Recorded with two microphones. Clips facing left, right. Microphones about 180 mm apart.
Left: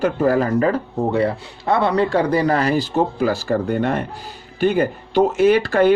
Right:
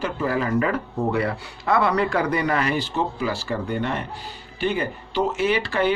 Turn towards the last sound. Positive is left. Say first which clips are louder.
# left 7 dB
turn(degrees=45)  # may be behind; listen again after turning